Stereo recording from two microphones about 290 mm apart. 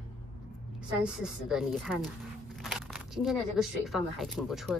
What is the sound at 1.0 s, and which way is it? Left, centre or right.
Speech, centre.